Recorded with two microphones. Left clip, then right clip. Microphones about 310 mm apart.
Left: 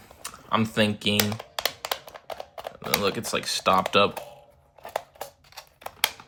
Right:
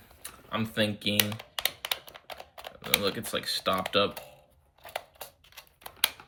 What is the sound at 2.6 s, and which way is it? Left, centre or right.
Speech, centre.